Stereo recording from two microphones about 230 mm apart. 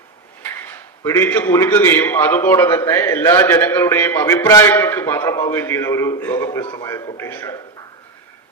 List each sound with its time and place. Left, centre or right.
1.0 s a man's voice: centre